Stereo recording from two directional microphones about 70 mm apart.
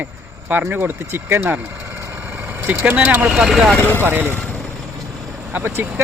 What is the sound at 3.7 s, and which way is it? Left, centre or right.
Speech, left.